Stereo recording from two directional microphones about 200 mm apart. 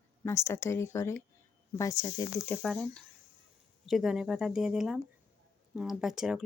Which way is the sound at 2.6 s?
5° left (ahead or behind).